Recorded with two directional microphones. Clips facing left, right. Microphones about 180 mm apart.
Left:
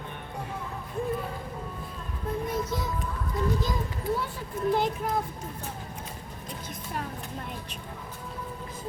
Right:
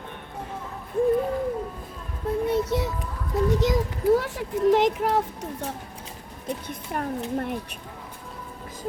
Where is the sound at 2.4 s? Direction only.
70° right (ahead or behind).